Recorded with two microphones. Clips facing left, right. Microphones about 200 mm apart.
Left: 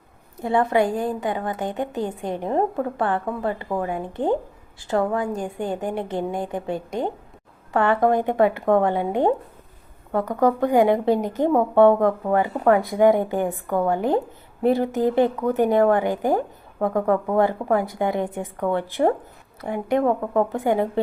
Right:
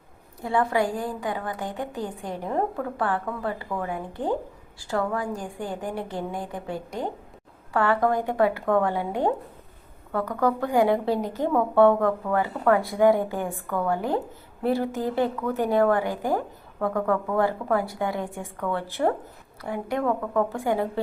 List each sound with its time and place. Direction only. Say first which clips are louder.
0.4 s a woman's voice: left 4 dB; 20° left (ahead or behind)